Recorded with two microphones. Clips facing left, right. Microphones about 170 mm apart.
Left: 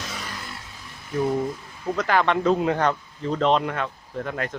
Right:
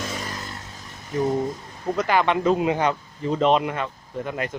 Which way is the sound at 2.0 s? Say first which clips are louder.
Right 1 dB; 5° right (ahead or behind).